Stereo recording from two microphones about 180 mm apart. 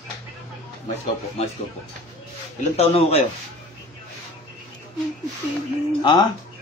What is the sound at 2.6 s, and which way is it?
Speech, 35° left (ahead or behind).